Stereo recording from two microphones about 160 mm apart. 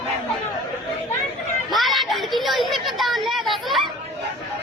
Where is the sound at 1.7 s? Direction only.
Centre (ahead or behind).